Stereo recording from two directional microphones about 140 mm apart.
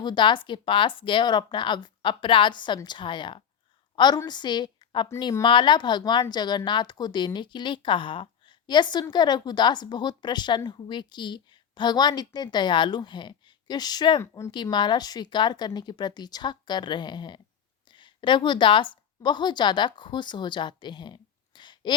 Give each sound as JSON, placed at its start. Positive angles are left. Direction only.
{"t": 0.0, "sound": "a woman's voice", "side_deg": 35}
{"t": 14.2, "sound": "speech", "side_deg": 20}
{"t": 14.5, "sound": "a woman's voice", "side_deg": 35}